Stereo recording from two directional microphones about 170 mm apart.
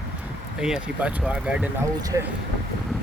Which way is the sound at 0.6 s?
5° right (ahead or behind).